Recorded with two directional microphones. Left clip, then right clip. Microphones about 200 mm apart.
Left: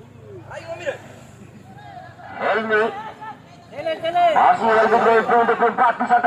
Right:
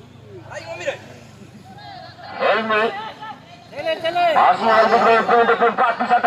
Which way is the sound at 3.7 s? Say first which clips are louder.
Right 1 dB; 55° left (ahead or behind).